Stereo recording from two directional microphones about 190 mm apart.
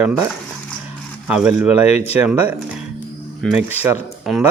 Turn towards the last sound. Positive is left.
turn(degrees=-5)  # may be behind; listen again after turning